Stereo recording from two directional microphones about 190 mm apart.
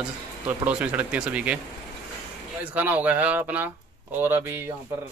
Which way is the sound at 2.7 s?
10° right (ahead or behind).